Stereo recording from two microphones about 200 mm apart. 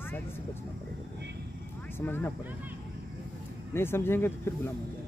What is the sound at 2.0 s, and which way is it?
Speech, 10° left (ahead or behind).